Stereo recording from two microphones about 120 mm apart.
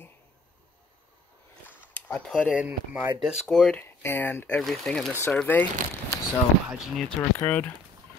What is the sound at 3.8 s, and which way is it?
Speech, 15° left (ahead or behind).